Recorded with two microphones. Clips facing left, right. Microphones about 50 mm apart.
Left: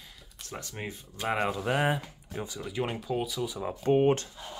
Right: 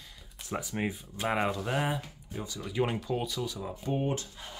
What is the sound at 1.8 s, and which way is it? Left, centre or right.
Speech, left.